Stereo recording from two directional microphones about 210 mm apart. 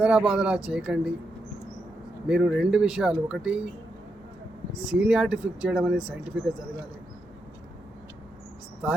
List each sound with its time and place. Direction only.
0.0 s speech: 5° right (ahead or behind)
2.2 s speech: 5° right (ahead or behind)
4.8 s speech: 5° right (ahead or behind)